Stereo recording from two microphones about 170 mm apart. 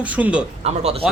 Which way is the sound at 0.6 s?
35° right (ahead or behind).